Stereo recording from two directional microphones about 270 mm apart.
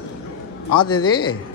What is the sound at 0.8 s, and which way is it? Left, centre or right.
Speech, centre.